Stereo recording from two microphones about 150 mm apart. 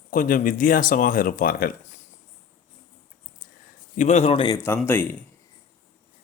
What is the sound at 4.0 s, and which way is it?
Speech, 50° left (ahead or behind).